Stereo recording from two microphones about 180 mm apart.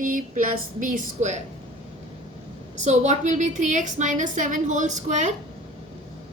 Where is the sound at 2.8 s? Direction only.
40° right (ahead or behind).